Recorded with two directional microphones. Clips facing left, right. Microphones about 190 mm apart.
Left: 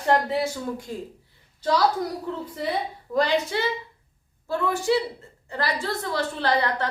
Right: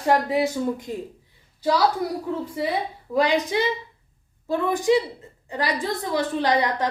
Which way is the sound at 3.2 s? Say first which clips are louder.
Right 2 dB; 15° right (ahead or behind).